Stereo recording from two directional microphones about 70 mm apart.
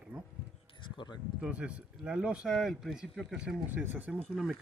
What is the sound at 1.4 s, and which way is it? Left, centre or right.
Speech, centre.